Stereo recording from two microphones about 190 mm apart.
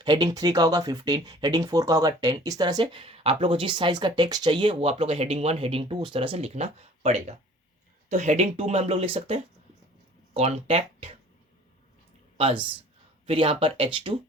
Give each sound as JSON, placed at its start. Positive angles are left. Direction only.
{"t": 0.0, "sound": "speech", "side_deg": -25}
{"t": 13.2, "sound": "speech", "side_deg": -30}